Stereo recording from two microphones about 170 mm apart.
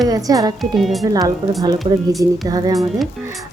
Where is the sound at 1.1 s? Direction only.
20° right (ahead or behind).